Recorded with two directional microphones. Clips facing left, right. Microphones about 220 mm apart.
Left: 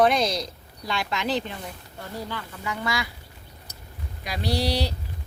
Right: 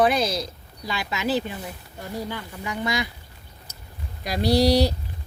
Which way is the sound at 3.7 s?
25° right (ahead or behind).